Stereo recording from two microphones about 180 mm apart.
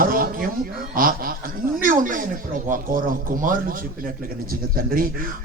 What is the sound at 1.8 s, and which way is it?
Speech, 50° right (ahead or behind).